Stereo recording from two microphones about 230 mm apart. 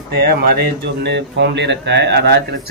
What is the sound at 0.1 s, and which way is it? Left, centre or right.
Speech, right.